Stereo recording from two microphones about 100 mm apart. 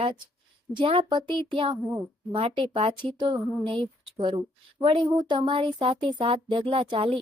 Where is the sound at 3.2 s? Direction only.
50° right (ahead or behind).